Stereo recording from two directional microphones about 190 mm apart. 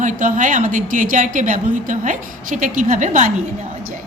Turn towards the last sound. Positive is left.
turn(degrees=-40)  # may be behind; listen again after turning